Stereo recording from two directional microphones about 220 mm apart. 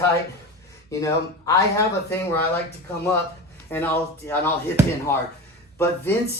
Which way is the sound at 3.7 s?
10° left (ahead or behind).